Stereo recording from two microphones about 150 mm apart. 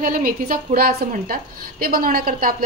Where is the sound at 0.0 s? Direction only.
65° right (ahead or behind).